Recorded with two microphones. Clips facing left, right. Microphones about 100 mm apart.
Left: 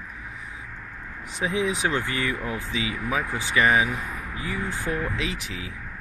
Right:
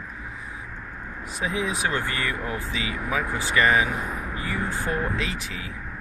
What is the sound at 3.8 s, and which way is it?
Speech, 35° right (ahead or behind).